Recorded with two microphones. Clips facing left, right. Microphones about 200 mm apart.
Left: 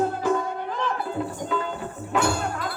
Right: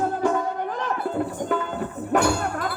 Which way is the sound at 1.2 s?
55° right (ahead or behind).